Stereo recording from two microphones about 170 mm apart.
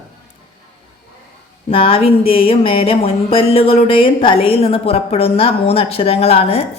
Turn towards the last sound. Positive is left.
turn(degrees=35)  # may be behind; listen again after turning